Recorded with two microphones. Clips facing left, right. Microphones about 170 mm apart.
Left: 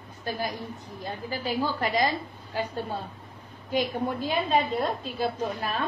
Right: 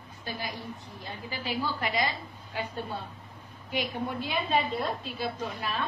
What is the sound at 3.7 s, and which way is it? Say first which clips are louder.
A woman's voice: left 5 dB; 40° left (ahead or behind).